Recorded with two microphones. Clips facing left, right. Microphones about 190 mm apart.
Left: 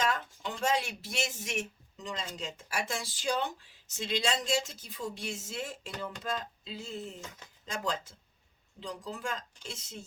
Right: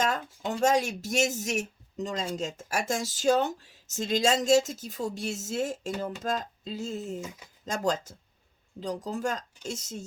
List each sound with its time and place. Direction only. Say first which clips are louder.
0.0 s a sound: right 3 dB; 45° right (ahead or behind)
0.6 s speech: right 6 dB; 45° right (ahead or behind)
7.2 s speech: right 8 dB; 10° right (ahead or behind)
7.6 s speech: right 7 dB; 45° right (ahead or behind)